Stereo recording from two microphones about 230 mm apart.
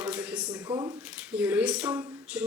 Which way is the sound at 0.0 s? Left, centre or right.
Centre.